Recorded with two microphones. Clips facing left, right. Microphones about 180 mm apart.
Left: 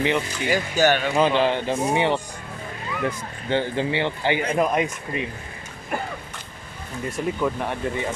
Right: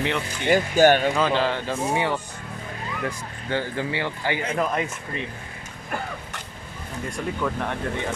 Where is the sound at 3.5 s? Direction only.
25° left (ahead or behind).